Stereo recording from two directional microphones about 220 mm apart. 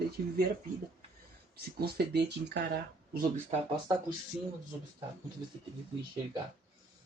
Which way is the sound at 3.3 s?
30° right (ahead or behind).